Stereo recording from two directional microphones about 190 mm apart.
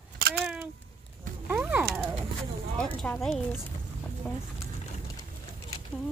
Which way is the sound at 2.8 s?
5° left (ahead or behind).